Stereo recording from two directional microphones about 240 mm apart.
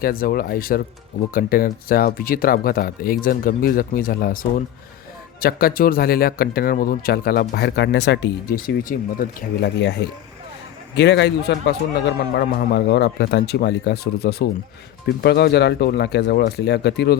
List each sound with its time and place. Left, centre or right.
0.0 s a man's voice: left